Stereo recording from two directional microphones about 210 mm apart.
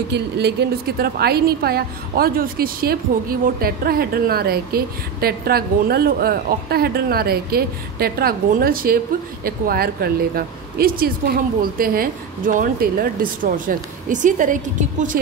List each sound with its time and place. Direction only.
0.1 s a woman's voice: 50° right (ahead or behind)